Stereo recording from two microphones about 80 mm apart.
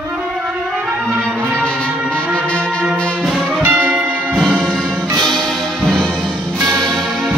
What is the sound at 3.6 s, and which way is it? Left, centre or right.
Music, right.